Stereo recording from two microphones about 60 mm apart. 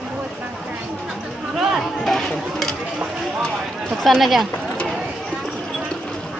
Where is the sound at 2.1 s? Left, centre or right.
Centre.